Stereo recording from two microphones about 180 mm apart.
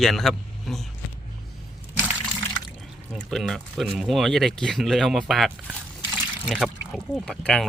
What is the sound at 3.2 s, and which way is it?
Speech, centre (ahead or behind).